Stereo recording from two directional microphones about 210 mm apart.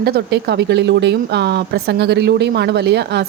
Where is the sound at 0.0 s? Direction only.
50° right (ahead or behind).